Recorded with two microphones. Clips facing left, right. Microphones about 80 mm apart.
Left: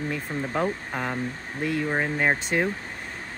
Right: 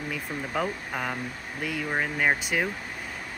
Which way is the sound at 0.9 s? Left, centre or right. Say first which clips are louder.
Left 2 dB; centre.